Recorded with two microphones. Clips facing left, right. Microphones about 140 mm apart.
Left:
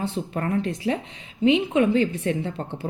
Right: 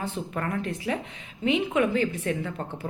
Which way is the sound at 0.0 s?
30° left (ahead or behind).